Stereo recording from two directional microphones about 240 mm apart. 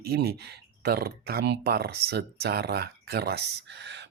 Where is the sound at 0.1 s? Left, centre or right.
Right.